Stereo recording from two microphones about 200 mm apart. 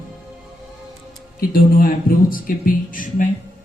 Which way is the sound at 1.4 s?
45° left (ahead or behind).